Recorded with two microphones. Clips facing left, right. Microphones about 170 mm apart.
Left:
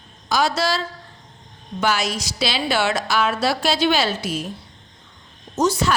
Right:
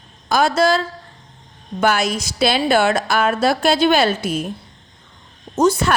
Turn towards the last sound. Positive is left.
turn(degrees=-55)  # may be behind; listen again after turning